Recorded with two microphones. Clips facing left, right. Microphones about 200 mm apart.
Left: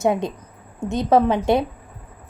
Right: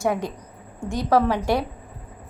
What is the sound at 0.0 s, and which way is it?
A woman's voice, 20° left (ahead or behind).